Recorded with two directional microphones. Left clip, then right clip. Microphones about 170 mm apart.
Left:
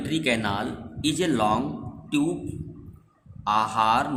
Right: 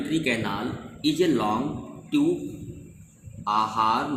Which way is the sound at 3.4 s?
60° left (ahead or behind).